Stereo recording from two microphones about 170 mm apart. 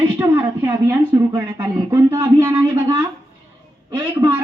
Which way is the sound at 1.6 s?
15° right (ahead or behind).